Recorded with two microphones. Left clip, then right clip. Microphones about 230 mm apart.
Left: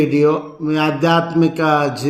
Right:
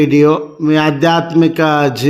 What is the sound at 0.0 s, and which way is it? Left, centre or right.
Speech, right.